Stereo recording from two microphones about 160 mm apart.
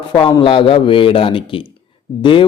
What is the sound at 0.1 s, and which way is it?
Speech, 30° left (ahead or behind).